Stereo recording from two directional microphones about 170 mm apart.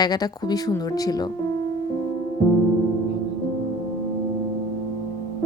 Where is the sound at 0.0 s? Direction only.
25° left (ahead or behind).